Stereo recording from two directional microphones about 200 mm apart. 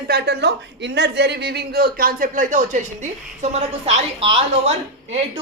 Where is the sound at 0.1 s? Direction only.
55° right (ahead or behind); by 4.7 s 30° right (ahead or behind).